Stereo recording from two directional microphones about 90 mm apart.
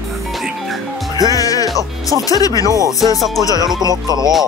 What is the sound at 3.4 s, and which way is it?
Speech, 40° left (ahead or behind).